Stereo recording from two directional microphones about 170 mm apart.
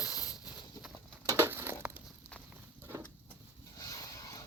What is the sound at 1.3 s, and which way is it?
Crushing, 15° right (ahead or behind).